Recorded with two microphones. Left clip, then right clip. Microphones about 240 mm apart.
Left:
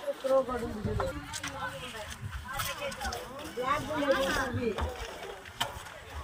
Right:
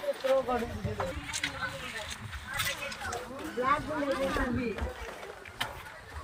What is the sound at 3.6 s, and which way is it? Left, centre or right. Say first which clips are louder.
Speech: left 1 dB; left.